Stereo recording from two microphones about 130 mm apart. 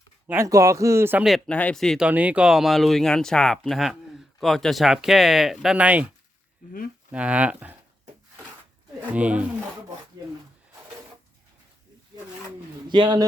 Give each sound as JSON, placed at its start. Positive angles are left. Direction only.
{"t": 0.3, "sound": "speech", "side_deg": -20}
{"t": 1.5, "sound": "speech", "side_deg": 10}
{"t": 2.0, "sound": "speech", "side_deg": -10}
{"t": 7.1, "sound": "speech", "side_deg": -10}
{"t": 9.1, "sound": "speech", "side_deg": -10}
{"t": 12.9, "sound": "speech", "side_deg": -35}